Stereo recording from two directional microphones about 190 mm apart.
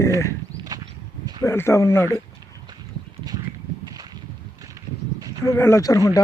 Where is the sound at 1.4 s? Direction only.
15° left (ahead or behind).